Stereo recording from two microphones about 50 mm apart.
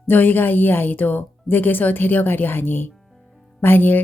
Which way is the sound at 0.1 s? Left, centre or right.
Left.